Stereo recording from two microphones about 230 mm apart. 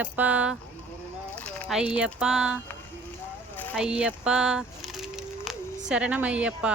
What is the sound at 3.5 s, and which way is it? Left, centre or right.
Vehicle, centre.